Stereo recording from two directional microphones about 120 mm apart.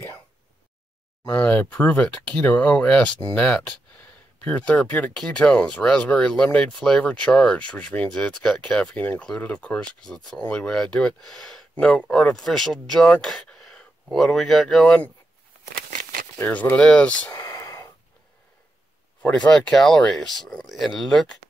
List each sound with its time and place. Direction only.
1.2 s speech: 15° left (ahead or behind)
16.3 s speech: 15° left (ahead or behind)
17.4 s whispering: 30° left (ahead or behind)
19.2 s speech: 5° left (ahead or behind)